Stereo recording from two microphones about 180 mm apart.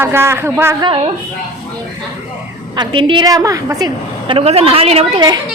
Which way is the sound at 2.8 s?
25° right (ahead or behind).